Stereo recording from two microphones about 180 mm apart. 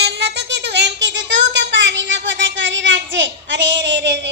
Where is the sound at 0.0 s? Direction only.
70° right (ahead or behind).